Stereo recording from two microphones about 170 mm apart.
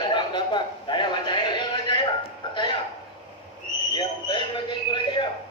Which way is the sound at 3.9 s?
30° left (ahead or behind).